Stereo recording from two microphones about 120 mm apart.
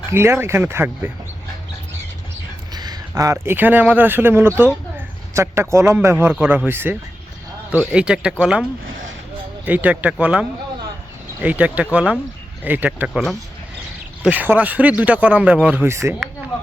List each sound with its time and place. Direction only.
0.1 s speech: 20° right (ahead or behind)
2.7 s speech: 35° right (ahead or behind); by 6.9 s 20° right (ahead or behind)
7.9 s speech: 10° right (ahead or behind)
9.6 s speech: 15° right (ahead or behind)
11.4 s speech: 15° right (ahead or behind)
14.2 s speech: 15° right (ahead or behind)